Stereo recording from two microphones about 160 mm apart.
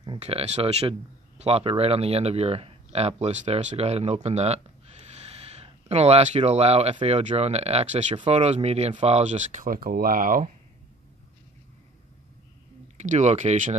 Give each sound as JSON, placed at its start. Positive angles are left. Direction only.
{"t": 0.0, "sound": "speech", "side_deg": -35}
{"t": 12.9, "sound": "speech", "side_deg": -50}